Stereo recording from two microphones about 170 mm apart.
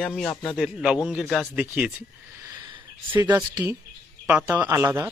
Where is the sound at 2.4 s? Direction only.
25° right (ahead or behind).